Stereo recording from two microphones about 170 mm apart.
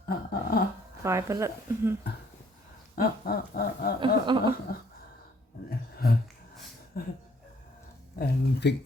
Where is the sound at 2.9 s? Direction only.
60° left (ahead or behind).